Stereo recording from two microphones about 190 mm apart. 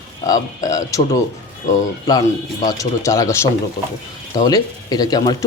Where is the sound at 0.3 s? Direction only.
20° left (ahead or behind).